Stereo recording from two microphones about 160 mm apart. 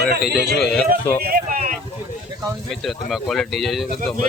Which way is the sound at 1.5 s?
60° right (ahead or behind).